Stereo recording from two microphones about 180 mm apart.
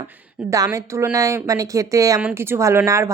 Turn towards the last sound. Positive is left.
turn(degrees=-15)  # may be behind; listen again after turning